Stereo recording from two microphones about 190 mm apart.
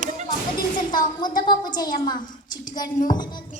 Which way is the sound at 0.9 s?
25° left (ahead or behind).